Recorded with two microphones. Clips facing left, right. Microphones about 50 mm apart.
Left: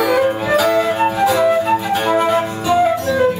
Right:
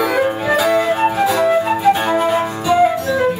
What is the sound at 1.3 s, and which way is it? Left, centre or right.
Flute, centre.